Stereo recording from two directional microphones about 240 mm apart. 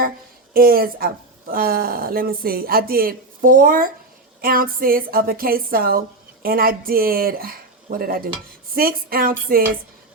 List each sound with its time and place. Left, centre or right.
0.5 s a woman's voice: right